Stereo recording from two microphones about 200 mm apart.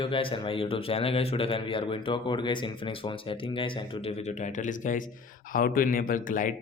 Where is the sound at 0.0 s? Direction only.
25° left (ahead or behind).